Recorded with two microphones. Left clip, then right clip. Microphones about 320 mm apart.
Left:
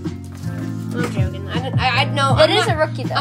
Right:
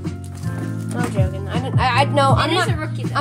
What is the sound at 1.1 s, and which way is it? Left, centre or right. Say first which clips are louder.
Music: right 1 dB; centre.